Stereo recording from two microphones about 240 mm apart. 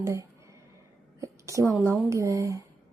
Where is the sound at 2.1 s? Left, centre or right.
Centre.